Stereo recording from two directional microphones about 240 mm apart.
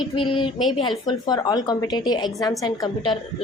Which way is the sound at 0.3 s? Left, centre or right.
Left.